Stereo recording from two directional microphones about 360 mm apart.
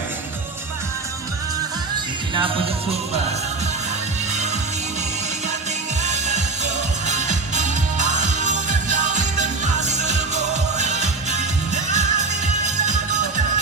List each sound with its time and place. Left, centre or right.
6.0 s music: centre